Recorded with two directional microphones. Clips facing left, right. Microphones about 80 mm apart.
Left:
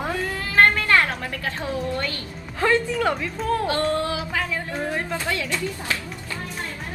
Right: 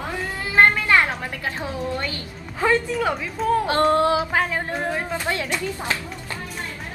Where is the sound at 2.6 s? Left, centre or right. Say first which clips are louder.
Even; centre.